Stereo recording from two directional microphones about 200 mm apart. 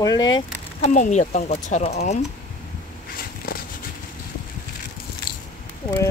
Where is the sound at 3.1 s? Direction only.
45° left (ahead or behind).